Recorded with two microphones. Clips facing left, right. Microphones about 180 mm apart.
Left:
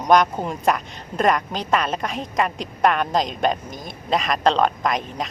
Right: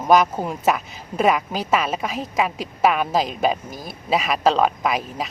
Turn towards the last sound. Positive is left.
turn(degrees=-5)  # may be behind; listen again after turning